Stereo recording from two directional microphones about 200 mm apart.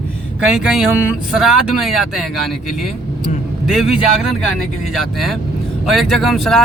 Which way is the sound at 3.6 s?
Centre (ahead or behind).